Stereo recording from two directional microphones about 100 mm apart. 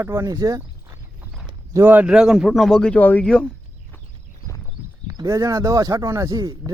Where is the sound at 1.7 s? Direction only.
20° right (ahead or behind); by 3.5 s 10° left (ahead or behind).